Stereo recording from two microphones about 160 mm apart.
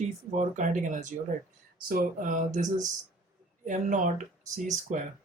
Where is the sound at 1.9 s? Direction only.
60° right (ahead or behind).